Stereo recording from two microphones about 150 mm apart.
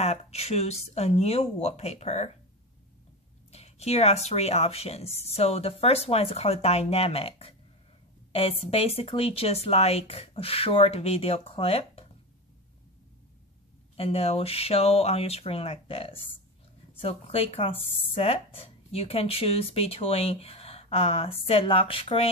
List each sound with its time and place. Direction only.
0.0 s speech: 45° left (ahead or behind)
3.5 s speech: 45° left (ahead or behind)
13.9 s speech: 40° left (ahead or behind)